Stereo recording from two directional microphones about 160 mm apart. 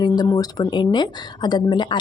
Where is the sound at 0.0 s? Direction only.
25° left (ahead or behind).